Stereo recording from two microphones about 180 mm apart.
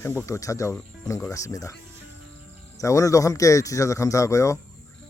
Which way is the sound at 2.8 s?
20° left (ahead or behind).